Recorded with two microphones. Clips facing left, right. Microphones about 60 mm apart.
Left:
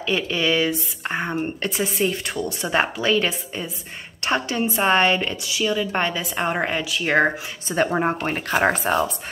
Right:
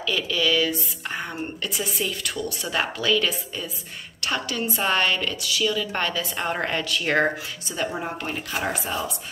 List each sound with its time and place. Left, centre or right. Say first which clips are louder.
0.0 s a woman's voice: left 2 dB; left; by 7.2 s centre
7.7 s speech: left 8 dB; left